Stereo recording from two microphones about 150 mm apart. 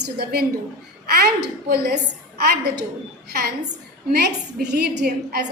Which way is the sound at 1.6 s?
90° right.